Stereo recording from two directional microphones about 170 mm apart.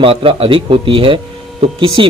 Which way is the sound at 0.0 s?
30° right (ahead or behind).